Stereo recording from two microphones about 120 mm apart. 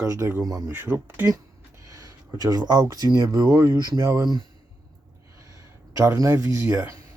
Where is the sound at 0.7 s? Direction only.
15° right (ahead or behind).